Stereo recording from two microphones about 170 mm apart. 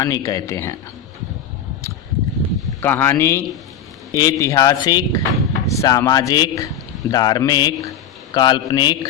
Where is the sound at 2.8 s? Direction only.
15° left (ahead or behind).